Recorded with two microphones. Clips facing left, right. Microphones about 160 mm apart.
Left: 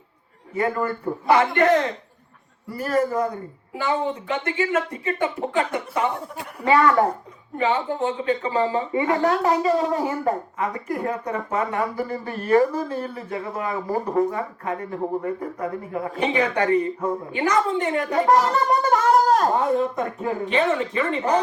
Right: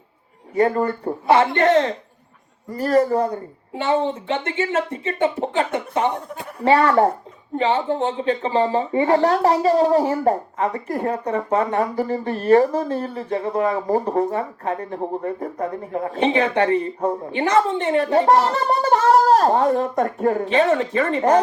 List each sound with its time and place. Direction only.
0.5 s a woman's voice: 35° right (ahead or behind)